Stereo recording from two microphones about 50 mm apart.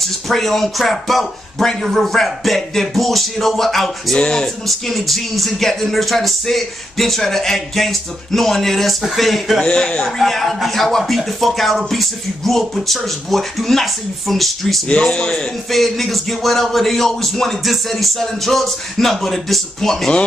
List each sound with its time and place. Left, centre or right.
0.0 s a man's voice: centre
4.2 s speech: centre
4.6 s a man's voice: centre
9.6 s a man's voice: centre
14.9 s a man's voice: centre